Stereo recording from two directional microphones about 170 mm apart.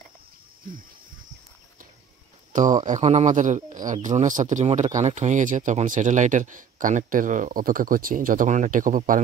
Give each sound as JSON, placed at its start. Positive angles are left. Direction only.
{"t": 2.8, "sound": "speech", "side_deg": -45}